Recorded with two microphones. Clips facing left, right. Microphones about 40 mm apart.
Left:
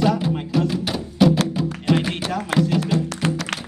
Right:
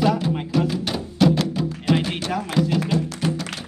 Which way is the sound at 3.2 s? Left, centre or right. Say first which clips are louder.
Left 1 dB; left.